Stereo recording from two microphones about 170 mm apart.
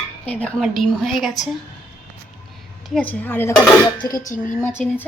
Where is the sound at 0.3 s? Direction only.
10° left (ahead or behind).